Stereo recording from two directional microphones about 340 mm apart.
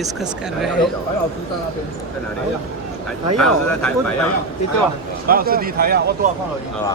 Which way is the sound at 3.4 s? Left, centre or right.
Centre.